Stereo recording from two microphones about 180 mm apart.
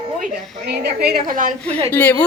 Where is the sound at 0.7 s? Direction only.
60° right (ahead or behind).